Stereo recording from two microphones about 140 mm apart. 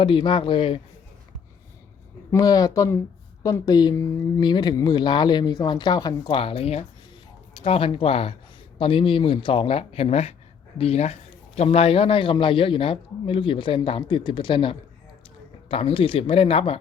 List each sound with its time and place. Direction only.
0.0 s speech: 35° left (ahead or behind)
2.3 s speech: 25° left (ahead or behind); by 16.8 s 45° left (ahead or behind)